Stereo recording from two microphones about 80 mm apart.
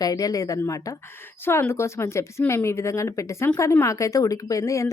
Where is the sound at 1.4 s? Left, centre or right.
Left.